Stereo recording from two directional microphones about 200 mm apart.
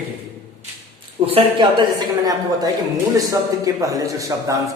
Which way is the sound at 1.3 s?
25° right (ahead or behind).